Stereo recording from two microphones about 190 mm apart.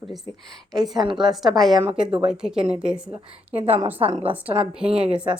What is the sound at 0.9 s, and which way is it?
Speech, 25° right (ahead or behind).